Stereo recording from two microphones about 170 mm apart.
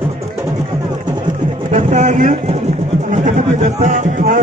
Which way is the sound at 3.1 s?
45° right (ahead or behind).